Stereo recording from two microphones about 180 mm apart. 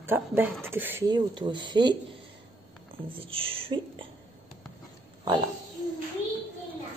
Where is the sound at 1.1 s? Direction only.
25° right (ahead or behind).